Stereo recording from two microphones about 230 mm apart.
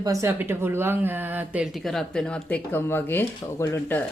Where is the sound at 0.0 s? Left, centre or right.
Centre.